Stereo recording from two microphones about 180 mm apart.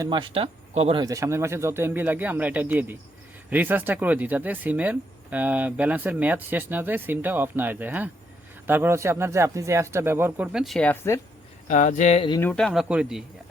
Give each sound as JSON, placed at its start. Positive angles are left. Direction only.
{"t": 0.0, "sound": "speech", "side_deg": -25}
{"t": 1.0, "sound": "speech", "side_deg": -15}
{"t": 11.7, "sound": "speech", "side_deg": 40}
{"t": 12.4, "sound": "speech", "side_deg": 5}